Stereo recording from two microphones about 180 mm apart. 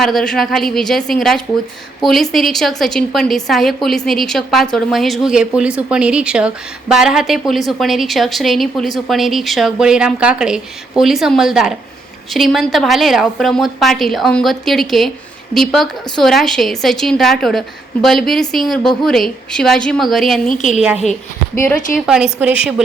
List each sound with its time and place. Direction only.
0.0 s a woman's voice: centre (ahead or behind)
20.5 s a woman's voice: 45° left (ahead or behind)
20.8 s a woman's voice: centre (ahead or behind)